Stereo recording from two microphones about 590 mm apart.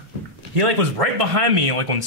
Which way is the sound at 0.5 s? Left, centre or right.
Right.